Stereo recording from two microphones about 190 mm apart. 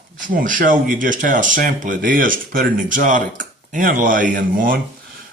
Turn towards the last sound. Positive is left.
turn(degrees=-45)  # may be behind; listen again after turning